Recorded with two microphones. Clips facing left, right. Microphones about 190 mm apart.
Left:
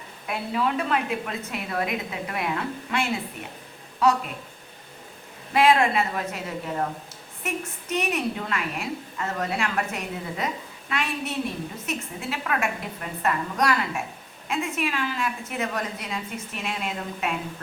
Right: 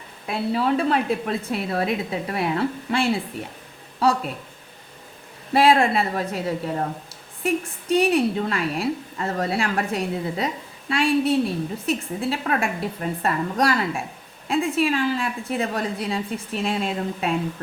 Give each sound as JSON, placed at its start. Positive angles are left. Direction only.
{"t": 0.3, "sound": "a woman's voice", "side_deg": -30}
{"t": 5.5, "sound": "a woman's voice", "side_deg": -35}